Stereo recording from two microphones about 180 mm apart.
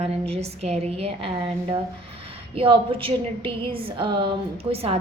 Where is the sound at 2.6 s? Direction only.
30° right (ahead or behind).